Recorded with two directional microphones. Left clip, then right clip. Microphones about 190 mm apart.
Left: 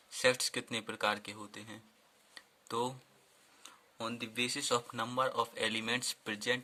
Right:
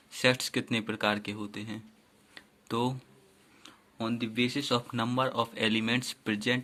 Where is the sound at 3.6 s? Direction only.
35° left (ahead or behind).